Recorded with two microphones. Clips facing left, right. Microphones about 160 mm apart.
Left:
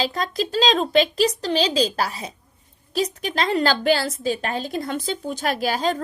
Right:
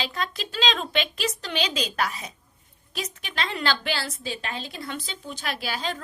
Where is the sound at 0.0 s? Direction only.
40° left (ahead or behind).